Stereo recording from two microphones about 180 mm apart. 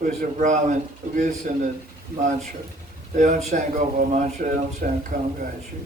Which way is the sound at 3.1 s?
45° right (ahead or behind).